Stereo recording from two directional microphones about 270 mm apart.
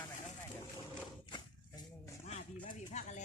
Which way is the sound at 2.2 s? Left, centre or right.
Left.